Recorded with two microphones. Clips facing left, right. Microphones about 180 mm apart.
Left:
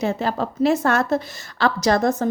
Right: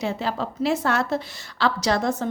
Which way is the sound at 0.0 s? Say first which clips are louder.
Left 4 dB; 45° left (ahead or behind).